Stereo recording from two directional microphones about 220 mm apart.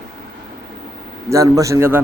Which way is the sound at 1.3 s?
15° right (ahead or behind).